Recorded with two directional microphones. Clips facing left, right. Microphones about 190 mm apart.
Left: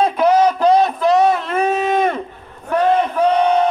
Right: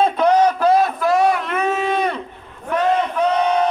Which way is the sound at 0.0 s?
5° left (ahead or behind).